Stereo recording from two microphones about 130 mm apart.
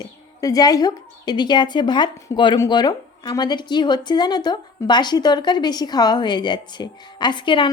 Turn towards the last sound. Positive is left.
turn(degrees=40)  # may be behind; listen again after turning